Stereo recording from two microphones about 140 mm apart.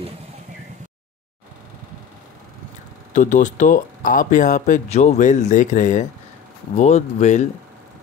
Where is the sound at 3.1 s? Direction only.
65° left (ahead or behind).